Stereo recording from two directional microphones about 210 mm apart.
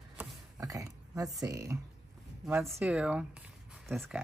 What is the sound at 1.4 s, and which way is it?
Speech, 15° right (ahead or behind).